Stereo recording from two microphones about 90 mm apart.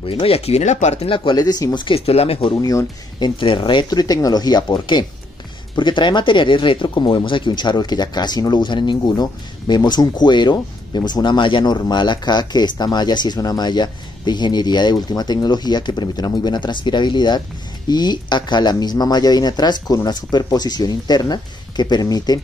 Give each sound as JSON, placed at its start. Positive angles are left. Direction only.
{"t": 0.0, "sound": "speech", "side_deg": 90}
{"t": 1.0, "sound": "speech", "side_deg": 70}
{"t": 1.3, "sound": "speech", "side_deg": 45}
{"t": 3.2, "sound": "speech", "side_deg": 60}
{"t": 4.0, "sound": "speech", "side_deg": 45}